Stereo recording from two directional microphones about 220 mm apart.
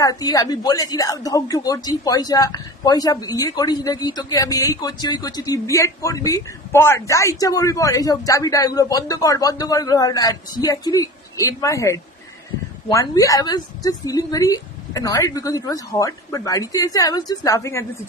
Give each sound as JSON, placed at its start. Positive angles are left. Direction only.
{"t": 0.0, "sound": "speech", "side_deg": 15}